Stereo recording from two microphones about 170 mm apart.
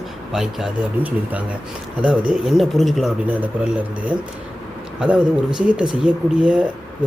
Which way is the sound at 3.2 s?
10° right (ahead or behind).